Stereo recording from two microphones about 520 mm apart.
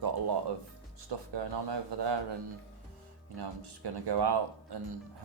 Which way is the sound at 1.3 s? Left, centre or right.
Right.